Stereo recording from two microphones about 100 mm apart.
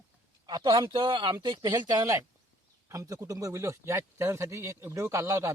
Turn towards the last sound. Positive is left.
turn(degrees=-30)  # may be behind; listen again after turning